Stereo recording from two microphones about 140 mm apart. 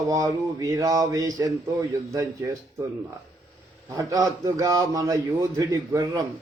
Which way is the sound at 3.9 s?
25° right (ahead or behind).